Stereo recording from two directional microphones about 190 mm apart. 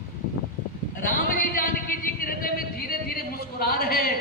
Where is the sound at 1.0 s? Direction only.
50° left (ahead or behind).